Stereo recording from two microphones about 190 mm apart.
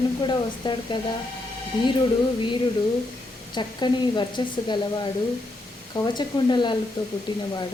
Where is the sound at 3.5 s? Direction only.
25° left (ahead or behind).